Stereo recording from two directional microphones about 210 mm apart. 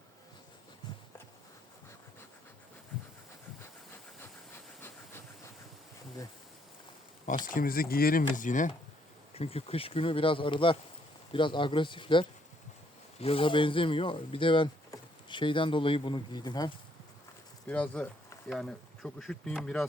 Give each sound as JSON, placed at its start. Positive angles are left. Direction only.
{"t": 4.2, "sound": "steam", "side_deg": 10}
{"t": 7.4, "sound": "speech", "side_deg": 40}
{"t": 17.7, "sound": "speech", "side_deg": 5}